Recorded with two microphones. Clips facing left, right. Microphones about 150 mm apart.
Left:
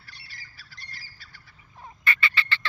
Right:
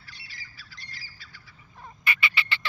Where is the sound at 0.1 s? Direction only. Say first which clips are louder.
Right 1 dB; 55° left (ahead or behind).